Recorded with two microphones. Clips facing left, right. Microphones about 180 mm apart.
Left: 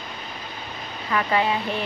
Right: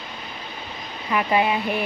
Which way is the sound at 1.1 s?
15° right (ahead or behind).